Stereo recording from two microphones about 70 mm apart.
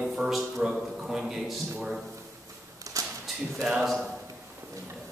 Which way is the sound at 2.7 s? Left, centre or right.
Right.